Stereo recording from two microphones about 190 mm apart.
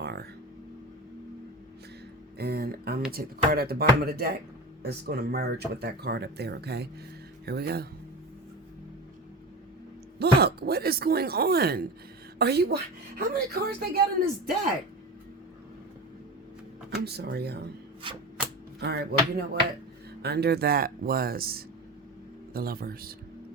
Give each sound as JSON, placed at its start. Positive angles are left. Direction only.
{"t": 0.0, "sound": "a sound", "side_deg": -60}
{"t": 2.4, "sound": "speech", "side_deg": -55}
{"t": 10.2, "sound": "speech", "side_deg": -55}
{"t": 17.0, "sound": "speech", "side_deg": -60}
{"t": 18.0, "sound": "chopping", "side_deg": -25}
{"t": 18.8, "sound": "speech", "side_deg": -60}